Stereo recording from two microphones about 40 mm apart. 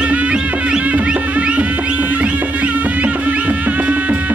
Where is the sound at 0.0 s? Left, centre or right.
Right.